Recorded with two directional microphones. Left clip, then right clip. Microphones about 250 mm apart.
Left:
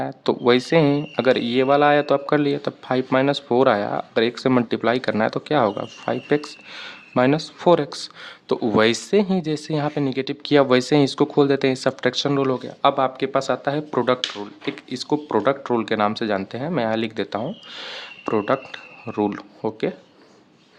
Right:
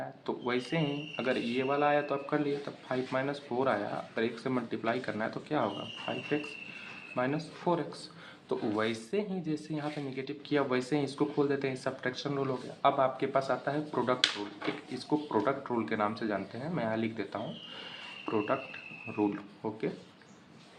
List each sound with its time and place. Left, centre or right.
0.0 s speech: left